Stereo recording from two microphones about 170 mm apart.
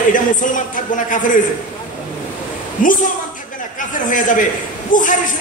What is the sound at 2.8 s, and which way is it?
Speech, 50° left (ahead or behind).